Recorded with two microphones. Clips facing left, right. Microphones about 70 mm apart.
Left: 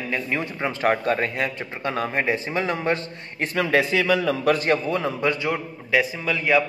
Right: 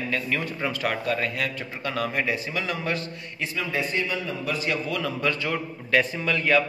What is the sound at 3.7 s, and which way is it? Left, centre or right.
Speech, left.